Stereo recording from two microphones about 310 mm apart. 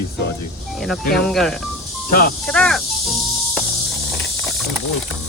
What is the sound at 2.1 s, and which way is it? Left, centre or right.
Speech, left.